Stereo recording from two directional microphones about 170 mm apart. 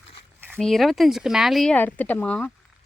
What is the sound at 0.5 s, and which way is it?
Speech, centre (ahead or behind).